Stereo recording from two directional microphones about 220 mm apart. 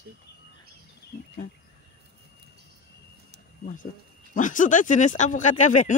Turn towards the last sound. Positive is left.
turn(degrees=35)  # may be behind; listen again after turning